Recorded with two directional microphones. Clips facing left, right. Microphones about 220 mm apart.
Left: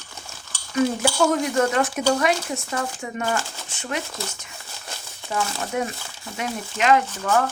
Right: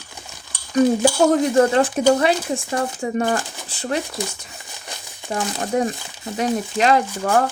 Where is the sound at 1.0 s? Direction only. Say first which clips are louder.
Right 5 dB; 35° right (ahead or behind).